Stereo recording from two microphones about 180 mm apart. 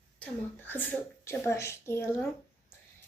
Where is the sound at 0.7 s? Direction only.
10° left (ahead or behind).